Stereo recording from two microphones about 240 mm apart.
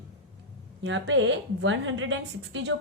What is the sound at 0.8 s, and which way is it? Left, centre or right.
Speech, right.